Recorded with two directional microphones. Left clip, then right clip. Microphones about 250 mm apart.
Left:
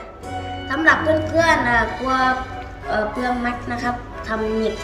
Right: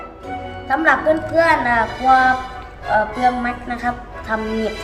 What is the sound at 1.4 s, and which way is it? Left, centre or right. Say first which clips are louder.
Speech: right 1 dB; centre.